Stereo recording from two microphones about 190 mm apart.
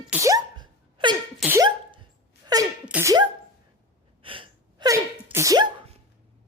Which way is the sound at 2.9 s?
10° right (ahead or behind).